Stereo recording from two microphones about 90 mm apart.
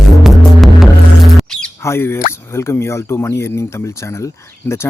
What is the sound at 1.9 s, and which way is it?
Speech, 25° left (ahead or behind).